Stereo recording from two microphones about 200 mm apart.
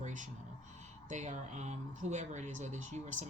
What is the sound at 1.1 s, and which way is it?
Speech, 35° right (ahead or behind).